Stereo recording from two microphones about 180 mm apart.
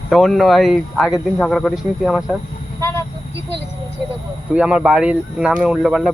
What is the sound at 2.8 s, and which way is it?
Vehicle, 15° left (ahead or behind).